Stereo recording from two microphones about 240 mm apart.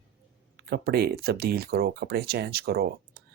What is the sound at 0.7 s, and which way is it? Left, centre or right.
Speech, right.